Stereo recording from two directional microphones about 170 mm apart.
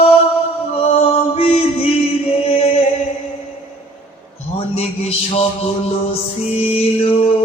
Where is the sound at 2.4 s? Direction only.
35° left (ahead or behind).